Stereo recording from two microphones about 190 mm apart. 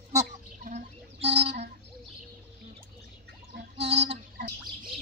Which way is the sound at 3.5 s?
65° right (ahead or behind).